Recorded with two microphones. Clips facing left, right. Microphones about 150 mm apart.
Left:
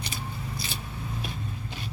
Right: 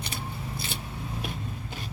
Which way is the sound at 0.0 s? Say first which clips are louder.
Even; 55° right (ahead or behind).